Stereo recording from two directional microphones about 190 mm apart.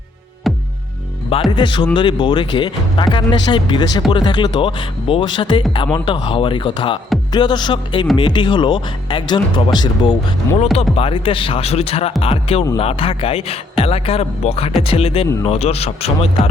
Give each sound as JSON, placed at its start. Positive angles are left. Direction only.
{"t": 0.4, "sound": "music", "side_deg": 0}
{"t": 1.5, "sound": "speech", "side_deg": 25}